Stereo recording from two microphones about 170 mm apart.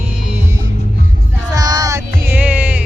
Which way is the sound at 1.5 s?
20° right (ahead or behind).